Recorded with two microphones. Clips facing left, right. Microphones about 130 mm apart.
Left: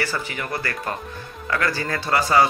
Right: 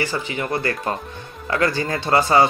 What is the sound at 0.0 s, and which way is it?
Speech, 20° right (ahead or behind).